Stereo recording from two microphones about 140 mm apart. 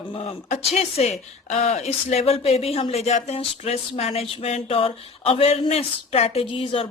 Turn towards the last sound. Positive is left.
turn(degrees=40)  # may be behind; listen again after turning